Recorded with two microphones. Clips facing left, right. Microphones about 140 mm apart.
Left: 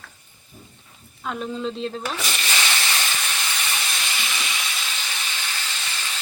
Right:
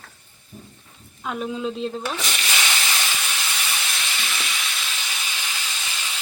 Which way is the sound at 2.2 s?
Centre (ahead or behind).